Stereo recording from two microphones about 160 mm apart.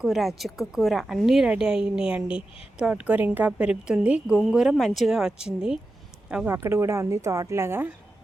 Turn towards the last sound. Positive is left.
turn(degrees=-15)  # may be behind; listen again after turning